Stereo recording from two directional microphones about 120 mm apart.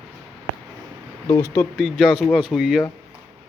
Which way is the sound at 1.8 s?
5° right (ahead or behind).